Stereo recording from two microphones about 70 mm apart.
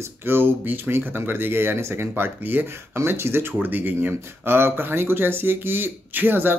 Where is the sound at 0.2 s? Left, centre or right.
Right.